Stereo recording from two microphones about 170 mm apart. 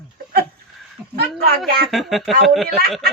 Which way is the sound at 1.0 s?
Centre (ahead or behind).